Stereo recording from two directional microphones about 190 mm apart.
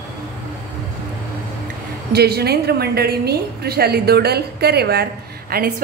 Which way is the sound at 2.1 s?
55° right (ahead or behind).